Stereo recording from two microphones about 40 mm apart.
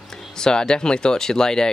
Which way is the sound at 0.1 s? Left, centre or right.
Centre.